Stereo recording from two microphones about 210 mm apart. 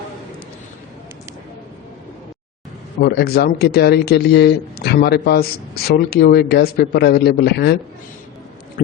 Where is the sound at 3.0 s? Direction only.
50° left (ahead or behind).